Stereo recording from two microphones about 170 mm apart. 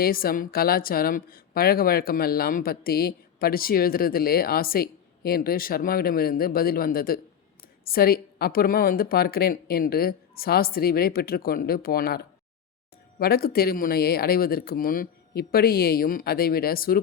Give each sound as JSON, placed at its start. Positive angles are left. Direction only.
{"t": 0.0, "sound": "a woman's voice", "side_deg": 60}